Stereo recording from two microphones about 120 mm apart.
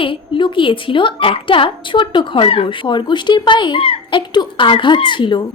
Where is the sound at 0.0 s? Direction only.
45° left (ahead or behind).